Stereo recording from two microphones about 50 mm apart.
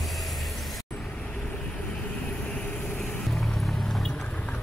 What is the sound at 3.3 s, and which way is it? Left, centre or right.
Music, centre.